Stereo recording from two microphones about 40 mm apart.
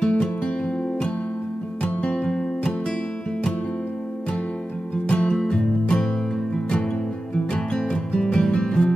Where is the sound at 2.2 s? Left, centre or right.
Centre.